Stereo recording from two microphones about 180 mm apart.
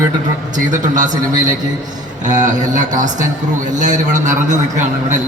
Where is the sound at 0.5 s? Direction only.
45° right (ahead or behind).